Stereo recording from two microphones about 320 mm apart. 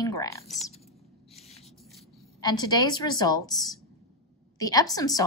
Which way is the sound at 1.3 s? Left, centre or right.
Centre.